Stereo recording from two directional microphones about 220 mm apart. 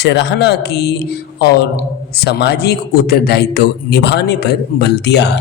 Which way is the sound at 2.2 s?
50° left (ahead or behind).